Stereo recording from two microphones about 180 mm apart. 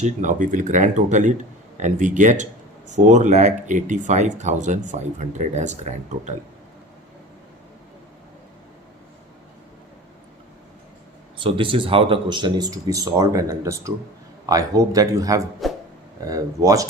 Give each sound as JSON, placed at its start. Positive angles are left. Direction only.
{"t": 0.0, "sound": "speech", "side_deg": -45}
{"t": 11.3, "sound": "speech", "side_deg": -30}
{"t": 15.6, "sound": "a sound", "side_deg": 0}
{"t": 16.2, "sound": "speech", "side_deg": -20}